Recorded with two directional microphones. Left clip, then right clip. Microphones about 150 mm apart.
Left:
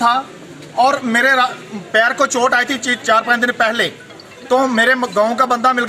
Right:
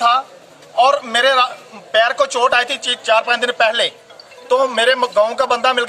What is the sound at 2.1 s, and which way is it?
Speech, 40° right (ahead or behind).